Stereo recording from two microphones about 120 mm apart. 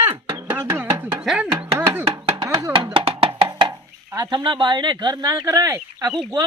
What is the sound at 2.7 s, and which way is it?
Music, 45° right (ahead or behind).